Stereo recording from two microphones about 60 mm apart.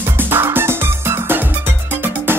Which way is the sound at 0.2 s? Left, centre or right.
Right.